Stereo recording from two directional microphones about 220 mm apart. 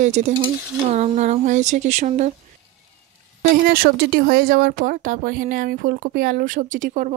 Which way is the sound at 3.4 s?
40° right (ahead or behind).